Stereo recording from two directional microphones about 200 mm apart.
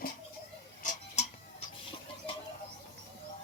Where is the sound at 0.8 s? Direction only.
40° left (ahead or behind).